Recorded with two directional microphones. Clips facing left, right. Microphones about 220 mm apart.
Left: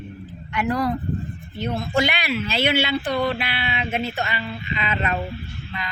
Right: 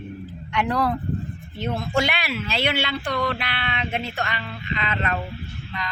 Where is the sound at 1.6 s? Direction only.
Centre (ahead or behind).